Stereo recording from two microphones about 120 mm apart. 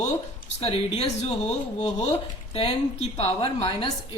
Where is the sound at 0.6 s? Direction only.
55° left (ahead or behind).